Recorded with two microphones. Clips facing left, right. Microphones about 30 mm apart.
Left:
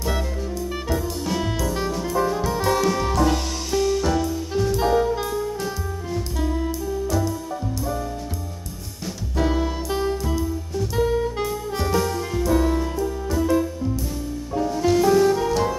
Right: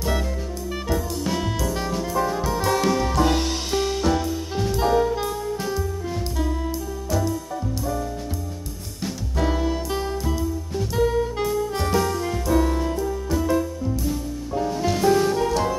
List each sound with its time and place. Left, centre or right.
0.8 s music: centre
3.2 s music: right
4.0 s music: centre
4.7 s saxophone: centre
6.1 s jazz: centre
7.1 s music: centre
9.4 s music: centre